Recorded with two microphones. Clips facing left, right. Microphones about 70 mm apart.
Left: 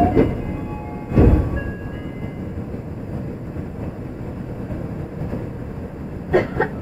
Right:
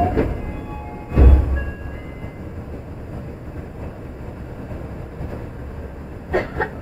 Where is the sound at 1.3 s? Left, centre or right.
Centre.